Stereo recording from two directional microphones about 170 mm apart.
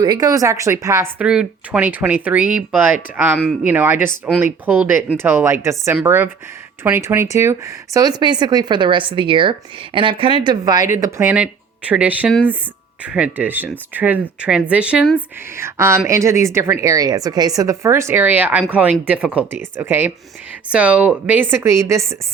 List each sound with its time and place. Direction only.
0.0 s speech: 25° right (ahead or behind)
1.2 s a woman's voice: 5° right (ahead or behind)